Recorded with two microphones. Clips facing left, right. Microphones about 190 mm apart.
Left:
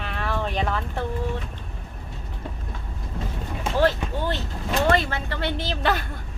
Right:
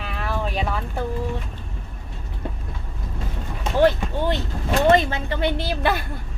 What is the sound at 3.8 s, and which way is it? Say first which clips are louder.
A woman's voice: right 4 dB; 15° right (ahead or behind).